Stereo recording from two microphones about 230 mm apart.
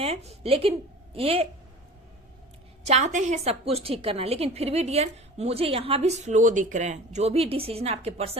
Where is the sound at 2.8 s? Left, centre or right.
Right.